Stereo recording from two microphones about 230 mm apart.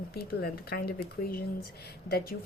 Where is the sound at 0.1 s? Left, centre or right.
Left.